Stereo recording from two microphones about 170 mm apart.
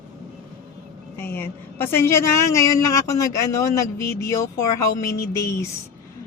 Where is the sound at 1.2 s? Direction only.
10° left (ahead or behind).